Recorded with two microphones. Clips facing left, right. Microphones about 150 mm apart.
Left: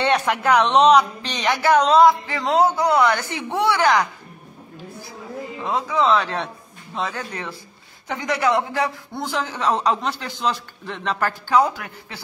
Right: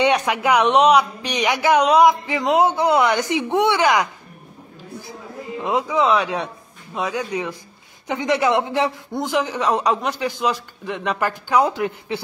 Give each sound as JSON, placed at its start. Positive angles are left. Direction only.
{"t": 0.0, "sound": "a man's voice", "side_deg": -10}
{"t": 5.6, "sound": "a man's voice", "side_deg": -15}